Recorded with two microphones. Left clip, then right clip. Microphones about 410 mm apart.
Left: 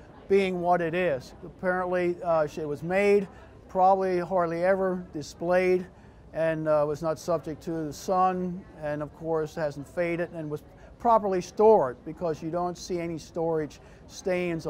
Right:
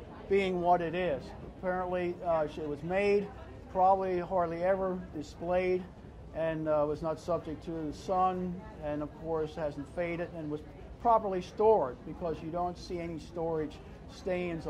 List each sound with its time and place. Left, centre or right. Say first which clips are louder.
0.3 s a man's voice: left 4 dB; left